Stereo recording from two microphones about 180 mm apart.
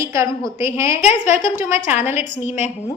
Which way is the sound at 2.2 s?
40° left (ahead or behind).